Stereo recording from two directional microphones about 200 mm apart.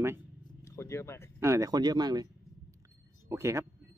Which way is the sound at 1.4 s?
15° right (ahead or behind).